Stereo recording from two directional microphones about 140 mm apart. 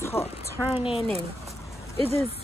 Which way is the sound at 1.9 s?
45° right (ahead or behind).